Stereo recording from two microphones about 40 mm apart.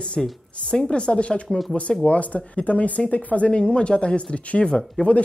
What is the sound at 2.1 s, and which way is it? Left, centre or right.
Speech, left.